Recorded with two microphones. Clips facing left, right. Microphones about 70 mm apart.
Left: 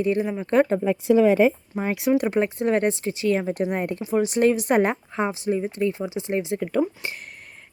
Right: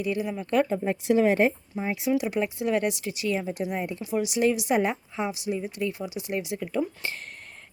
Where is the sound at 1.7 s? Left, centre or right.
Left.